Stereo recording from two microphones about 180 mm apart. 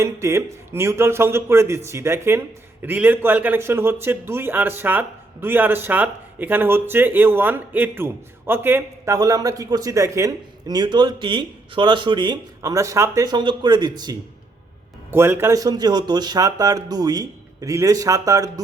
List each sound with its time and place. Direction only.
0.0 s a man's voice: 15° right (ahead or behind)